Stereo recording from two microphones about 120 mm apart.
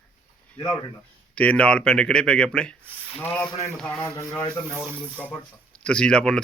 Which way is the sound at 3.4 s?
30° left (ahead or behind).